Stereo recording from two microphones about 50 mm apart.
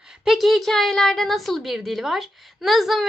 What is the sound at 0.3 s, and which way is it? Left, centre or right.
A woman's voice, centre.